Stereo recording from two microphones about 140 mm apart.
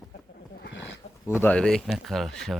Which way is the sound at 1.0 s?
50° left (ahead or behind).